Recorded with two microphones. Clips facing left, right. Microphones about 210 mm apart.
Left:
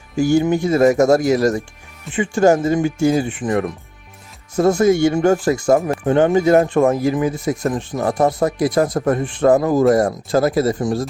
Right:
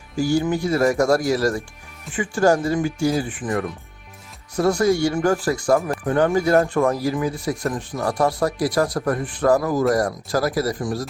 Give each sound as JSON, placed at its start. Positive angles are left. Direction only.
{"t": 0.2, "sound": "speech", "side_deg": 25}